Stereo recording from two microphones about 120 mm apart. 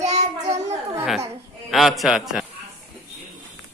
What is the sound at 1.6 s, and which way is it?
Speech, centre (ahead or behind).